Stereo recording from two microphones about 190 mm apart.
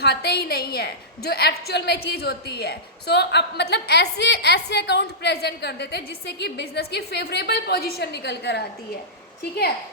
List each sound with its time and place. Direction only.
0.0 s a woman's voice: 60° left (ahead or behind)